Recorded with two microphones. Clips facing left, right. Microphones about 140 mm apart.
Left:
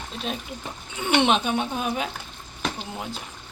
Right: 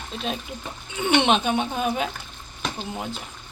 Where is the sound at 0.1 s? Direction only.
Centre (ahead or behind).